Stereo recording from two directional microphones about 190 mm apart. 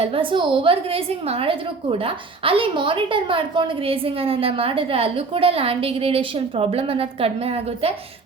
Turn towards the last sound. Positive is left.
turn(degrees=-30)  # may be behind; listen again after turning